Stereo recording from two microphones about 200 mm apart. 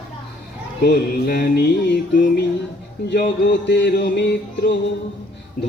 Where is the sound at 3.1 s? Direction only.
60° left (ahead or behind).